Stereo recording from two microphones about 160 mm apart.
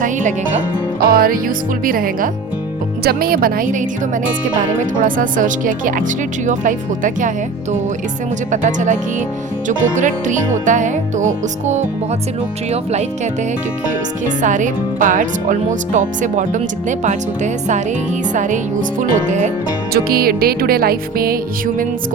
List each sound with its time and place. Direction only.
0.0 s speech: 50° right (ahead or behind)
1.1 s speech: 60° right (ahead or behind)
3.0 s speech: 70° right (ahead or behind); by 13.1 s 45° right (ahead or behind)
14.3 s speech: 55° right (ahead or behind)
19.9 s music: 70° right (ahead or behind)